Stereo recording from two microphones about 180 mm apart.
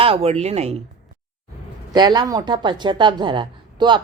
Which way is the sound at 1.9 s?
25° right (ahead or behind).